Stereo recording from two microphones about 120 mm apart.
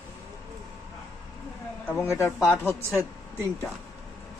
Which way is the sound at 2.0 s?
20° left (ahead or behind).